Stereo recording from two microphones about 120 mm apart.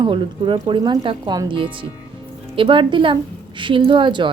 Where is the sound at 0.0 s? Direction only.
45° right (ahead or behind).